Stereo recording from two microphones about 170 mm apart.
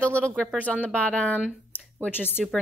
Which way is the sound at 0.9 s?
5° left (ahead or behind).